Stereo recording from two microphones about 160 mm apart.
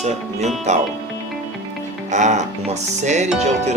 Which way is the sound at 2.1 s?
45° right (ahead or behind).